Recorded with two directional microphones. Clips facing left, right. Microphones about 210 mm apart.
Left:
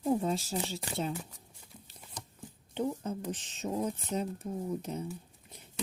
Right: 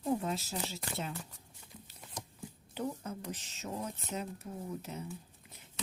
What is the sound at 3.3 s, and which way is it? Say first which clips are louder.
Speech: left 5 dB; 30° left (ahead or behind).